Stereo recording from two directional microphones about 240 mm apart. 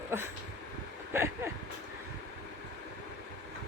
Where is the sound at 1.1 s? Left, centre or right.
Centre.